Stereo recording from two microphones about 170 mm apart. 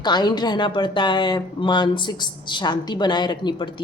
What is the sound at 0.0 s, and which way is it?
Speech, 25° left (ahead or behind).